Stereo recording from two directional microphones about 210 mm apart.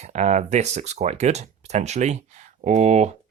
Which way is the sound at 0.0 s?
35° right (ahead or behind).